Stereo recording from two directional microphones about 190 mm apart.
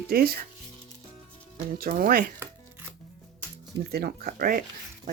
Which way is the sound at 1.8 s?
50° right (ahead or behind).